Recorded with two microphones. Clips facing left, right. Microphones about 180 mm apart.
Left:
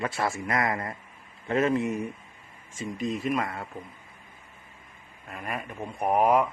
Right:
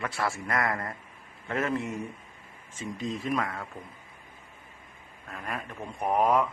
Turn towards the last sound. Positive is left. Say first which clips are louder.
# left 2 dB
turn(degrees=10)  # may be behind; listen again after turning